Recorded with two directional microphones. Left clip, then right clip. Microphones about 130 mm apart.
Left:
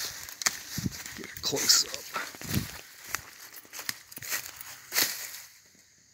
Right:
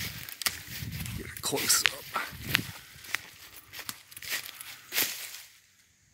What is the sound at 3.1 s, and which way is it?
Walk, 5° right (ahead or behind).